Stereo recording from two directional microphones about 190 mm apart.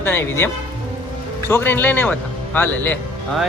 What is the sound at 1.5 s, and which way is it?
A man's voice, 10° left (ahead or behind).